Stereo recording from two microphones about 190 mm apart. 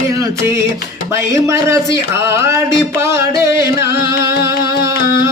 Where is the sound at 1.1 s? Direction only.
15° right (ahead or behind).